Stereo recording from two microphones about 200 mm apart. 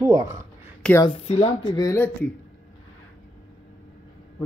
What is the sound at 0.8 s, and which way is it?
Speech, 10° left (ahead or behind).